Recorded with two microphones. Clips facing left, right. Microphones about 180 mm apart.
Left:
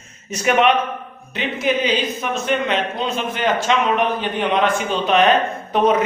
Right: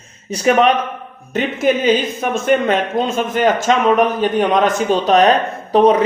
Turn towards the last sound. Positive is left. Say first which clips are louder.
# right 5 dB
turn(degrees=-35)  # may be behind; listen again after turning